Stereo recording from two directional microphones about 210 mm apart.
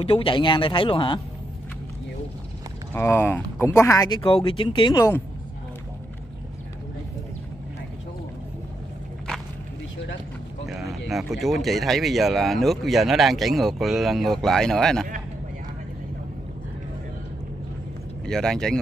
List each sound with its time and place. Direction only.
0.0 s speech: 25° left (ahead or behind)
2.9 s speech: 10° left (ahead or behind)
10.7 s speech: centre (ahead or behind)
18.2 s speech: 5° left (ahead or behind)